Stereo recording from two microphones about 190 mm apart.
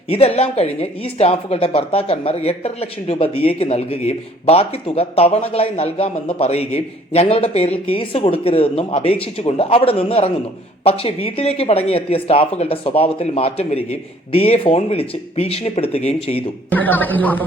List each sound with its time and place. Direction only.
0.1 s speech: 30° left (ahead or behind)
16.7 s a woman's voice: 10° left (ahead or behind)